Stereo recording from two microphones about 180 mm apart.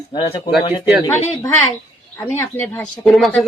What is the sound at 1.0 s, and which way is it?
Speech, 15° left (ahead or behind).